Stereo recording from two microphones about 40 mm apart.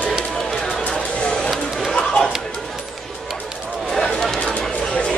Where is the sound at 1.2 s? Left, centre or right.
Left.